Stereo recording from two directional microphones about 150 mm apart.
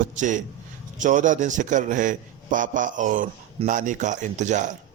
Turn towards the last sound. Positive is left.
turn(degrees=-55)  # may be behind; listen again after turning